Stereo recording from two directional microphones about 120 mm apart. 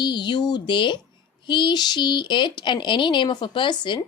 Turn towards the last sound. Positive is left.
turn(degrees=40)  # may be behind; listen again after turning